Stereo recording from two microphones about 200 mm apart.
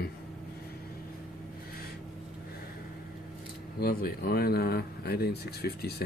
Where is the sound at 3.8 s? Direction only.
50° left (ahead or behind).